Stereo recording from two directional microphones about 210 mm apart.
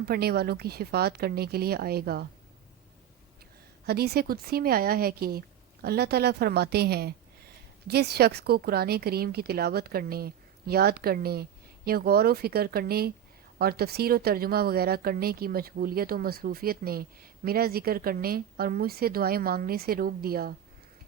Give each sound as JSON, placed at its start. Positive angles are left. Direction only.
{"t": 0.0, "sound": "speech", "side_deg": -50}
{"t": 3.8, "sound": "speech", "side_deg": -50}